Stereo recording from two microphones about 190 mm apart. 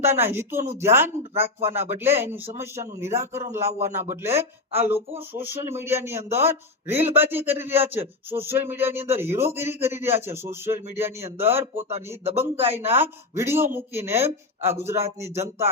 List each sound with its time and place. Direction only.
0.0 s a man's voice: 10° right (ahead or behind)
3.8 s speech: 40° right (ahead or behind)
4.2 s a man's voice: 15° right (ahead or behind)
11.9 s speech: 30° right (ahead or behind)
12.9 s a man's voice: 10° right (ahead or behind)